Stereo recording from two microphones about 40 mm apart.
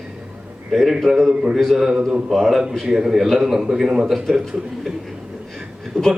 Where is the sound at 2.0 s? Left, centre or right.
Right.